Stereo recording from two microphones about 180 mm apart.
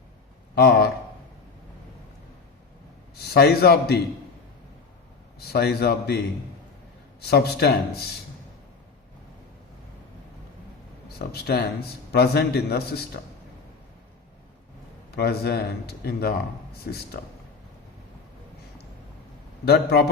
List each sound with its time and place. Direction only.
0.5 s a man's voice: 60° left (ahead or behind)
3.2 s a man's voice: 60° left (ahead or behind)
5.4 s a man's voice: 60° left (ahead or behind)
7.2 s a man's voice: 60° left (ahead or behind)
11.3 s a man's voice: 60° left (ahead or behind)
15.1 s a man's voice: 60° left (ahead or behind)
19.6 s a man's voice: 60° left (ahead or behind)